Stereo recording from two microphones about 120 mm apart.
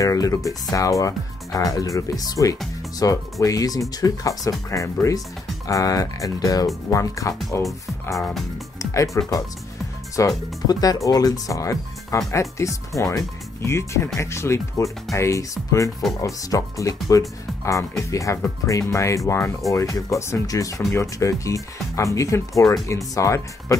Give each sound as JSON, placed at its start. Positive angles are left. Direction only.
{"t": 0.0, "sound": "speech", "side_deg": 30}
{"t": 8.0, "sound": "music", "side_deg": 25}
{"t": 10.1, "sound": "speech", "side_deg": 30}